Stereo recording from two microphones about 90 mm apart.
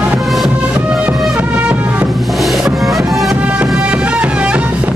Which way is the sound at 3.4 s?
15° right (ahead or behind).